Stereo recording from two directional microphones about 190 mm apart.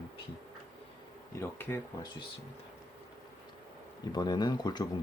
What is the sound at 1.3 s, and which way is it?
Speech, 10° left (ahead or behind).